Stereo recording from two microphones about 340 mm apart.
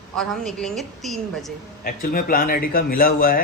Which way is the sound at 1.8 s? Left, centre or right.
Left.